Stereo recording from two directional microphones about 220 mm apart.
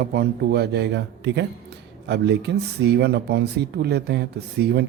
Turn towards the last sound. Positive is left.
turn(degrees=-50)  # may be behind; listen again after turning